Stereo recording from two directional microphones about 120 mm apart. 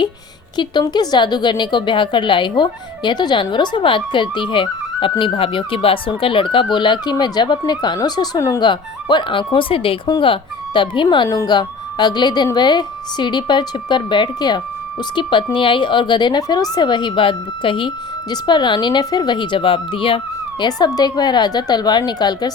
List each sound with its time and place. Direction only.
0.5 s a woman's voice: 40° left (ahead or behind)
11.3 s speech: 25° left (ahead or behind)
11.5 s a woman's voice: 35° left (ahead or behind)